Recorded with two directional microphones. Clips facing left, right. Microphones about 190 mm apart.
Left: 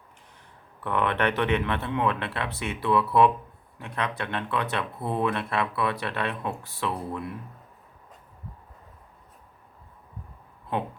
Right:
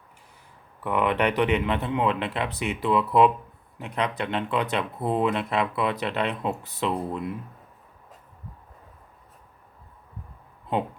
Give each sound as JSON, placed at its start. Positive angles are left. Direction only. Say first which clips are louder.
{"t": 0.8, "sound": "speech", "louder": "right 2 dB", "side_deg": -10}